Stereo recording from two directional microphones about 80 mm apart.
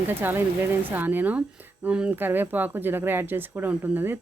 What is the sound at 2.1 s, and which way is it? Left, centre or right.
Speech, right.